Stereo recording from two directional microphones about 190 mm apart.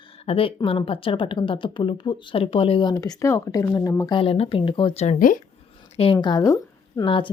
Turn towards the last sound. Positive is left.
turn(degrees=25)  # may be behind; listen again after turning